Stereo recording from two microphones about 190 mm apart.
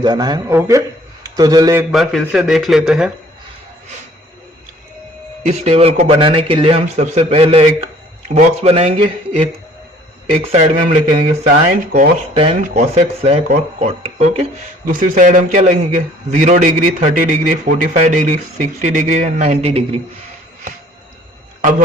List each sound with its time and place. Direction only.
0.0 s a man's voice: 20° right (ahead or behind)
1.9 s a man's voice: centre (ahead or behind)
5.5 s a man's voice: 30° right (ahead or behind)
8.6 s a man's voice: 30° right (ahead or behind)
14.8 s a man's voice: 45° right (ahead or behind)